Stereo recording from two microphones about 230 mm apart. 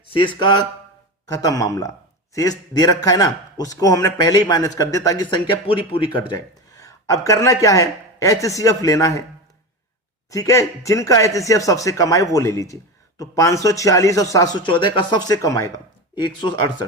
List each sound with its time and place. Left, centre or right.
0.1 s speech: left
10.2 s speech: centre